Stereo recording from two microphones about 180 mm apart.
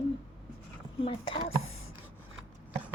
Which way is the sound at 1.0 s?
30° left (ahead or behind).